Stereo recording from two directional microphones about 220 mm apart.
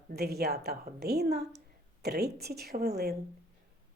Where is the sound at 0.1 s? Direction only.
45° right (ahead or behind).